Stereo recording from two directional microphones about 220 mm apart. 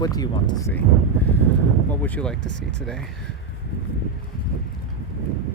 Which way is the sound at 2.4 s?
55° right (ahead or behind).